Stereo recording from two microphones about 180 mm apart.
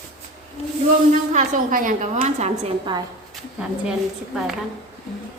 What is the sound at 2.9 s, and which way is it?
Speech, 25° right (ahead or behind).